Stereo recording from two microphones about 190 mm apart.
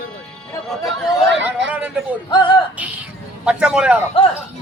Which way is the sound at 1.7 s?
5° right (ahead or behind).